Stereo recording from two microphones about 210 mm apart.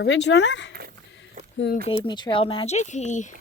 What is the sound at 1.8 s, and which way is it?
Speech, 20° left (ahead or behind).